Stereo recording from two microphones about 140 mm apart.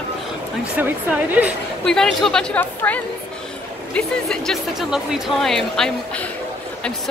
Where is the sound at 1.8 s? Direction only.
5° left (ahead or behind).